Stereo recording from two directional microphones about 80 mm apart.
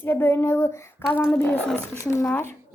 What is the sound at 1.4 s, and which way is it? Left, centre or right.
Speech, left.